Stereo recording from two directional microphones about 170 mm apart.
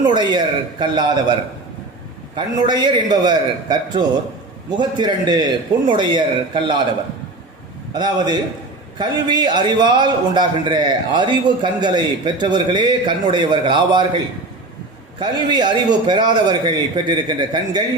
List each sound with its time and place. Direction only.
0.0 s a man's voice: 25° right (ahead or behind)
2.3 s a man's voice: 25° right (ahead or behind)
7.9 s a man's voice: 25° right (ahead or behind)
15.2 s a man's voice: 25° right (ahead or behind)